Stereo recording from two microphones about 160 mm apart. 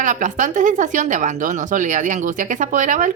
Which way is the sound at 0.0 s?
50° right (ahead or behind).